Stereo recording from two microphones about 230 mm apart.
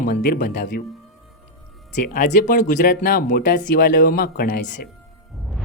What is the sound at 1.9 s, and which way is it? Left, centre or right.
Speech, left.